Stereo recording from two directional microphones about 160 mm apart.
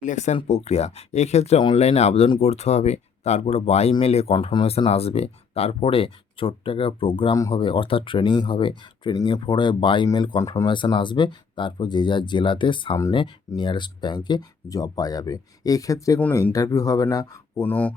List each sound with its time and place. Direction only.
0.0 s speech: 50° left (ahead or behind); by 17.4 s 20° left (ahead or behind)
17.6 s speech: 10° left (ahead or behind)